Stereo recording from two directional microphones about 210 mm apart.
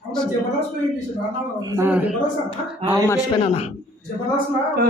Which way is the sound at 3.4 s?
30° left (ahead or behind).